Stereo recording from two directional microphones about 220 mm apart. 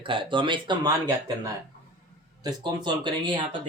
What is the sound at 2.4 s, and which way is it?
Speech, 20° right (ahead or behind).